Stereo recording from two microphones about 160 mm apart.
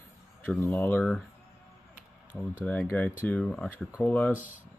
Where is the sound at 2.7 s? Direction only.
10° left (ahead or behind).